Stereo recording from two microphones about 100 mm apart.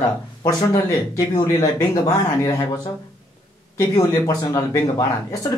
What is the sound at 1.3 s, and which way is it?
Speech, 40° left (ahead or behind).